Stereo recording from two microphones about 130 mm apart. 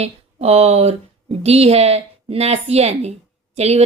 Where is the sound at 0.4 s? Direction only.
55° right (ahead or behind).